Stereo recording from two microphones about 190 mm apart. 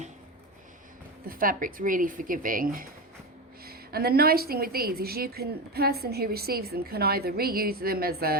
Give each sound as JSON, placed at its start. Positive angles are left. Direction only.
{"t": 1.3, "sound": "a woman's voice", "side_deg": -45}